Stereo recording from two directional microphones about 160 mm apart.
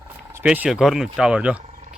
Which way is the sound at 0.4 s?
5° right (ahead or behind).